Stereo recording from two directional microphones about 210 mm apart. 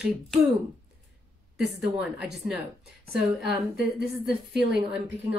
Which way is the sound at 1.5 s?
5° right (ahead or behind).